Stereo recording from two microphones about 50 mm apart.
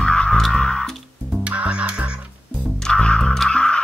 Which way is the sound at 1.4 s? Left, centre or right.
Right.